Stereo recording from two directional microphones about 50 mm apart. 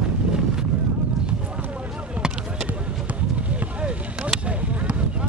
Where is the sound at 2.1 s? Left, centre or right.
Centre.